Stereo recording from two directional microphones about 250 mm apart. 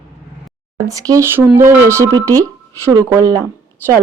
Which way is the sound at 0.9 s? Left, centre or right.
Centre.